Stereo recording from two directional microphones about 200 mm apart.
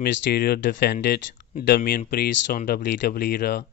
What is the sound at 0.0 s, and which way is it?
Speech, 50° left (ahead or behind).